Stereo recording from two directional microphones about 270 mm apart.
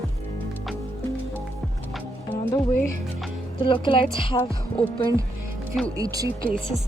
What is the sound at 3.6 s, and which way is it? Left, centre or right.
Speech, centre.